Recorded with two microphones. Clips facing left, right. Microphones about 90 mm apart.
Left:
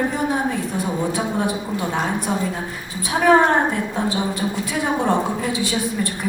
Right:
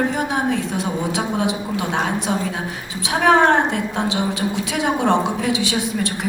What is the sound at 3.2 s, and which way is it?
A woman's voice, 75° right (ahead or behind).